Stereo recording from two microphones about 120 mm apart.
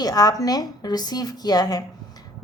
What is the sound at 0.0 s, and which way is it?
A woman's voice, 30° left (ahead or behind).